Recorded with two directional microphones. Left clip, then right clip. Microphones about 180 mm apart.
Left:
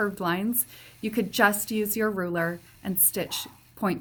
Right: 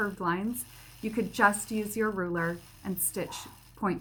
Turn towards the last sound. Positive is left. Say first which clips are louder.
# left 3 dB
turn(degrees=45)  # may be behind; listen again after turning